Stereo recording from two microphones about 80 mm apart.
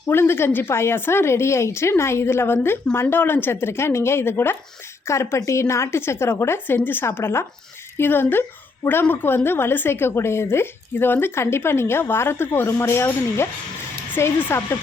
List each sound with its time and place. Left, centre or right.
0.1 s a woman's voice: left